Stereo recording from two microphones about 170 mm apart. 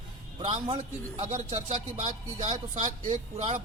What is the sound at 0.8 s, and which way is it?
Speech, 40° right (ahead or behind).